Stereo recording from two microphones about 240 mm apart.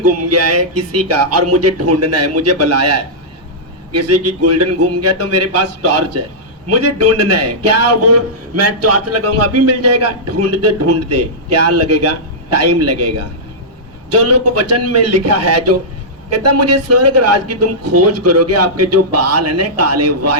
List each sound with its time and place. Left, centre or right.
0.0 s a man's voice: right